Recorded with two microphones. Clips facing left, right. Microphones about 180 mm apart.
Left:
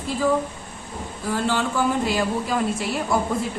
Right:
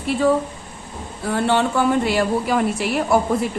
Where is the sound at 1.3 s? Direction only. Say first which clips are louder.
Right 5 dB; 65° right (ahead or behind).